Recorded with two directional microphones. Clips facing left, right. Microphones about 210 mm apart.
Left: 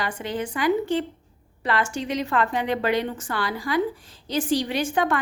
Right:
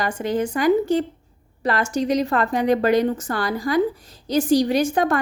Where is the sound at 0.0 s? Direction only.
45° right (ahead or behind).